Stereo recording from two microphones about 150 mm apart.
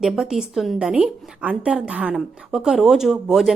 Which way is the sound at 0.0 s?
5° right (ahead or behind).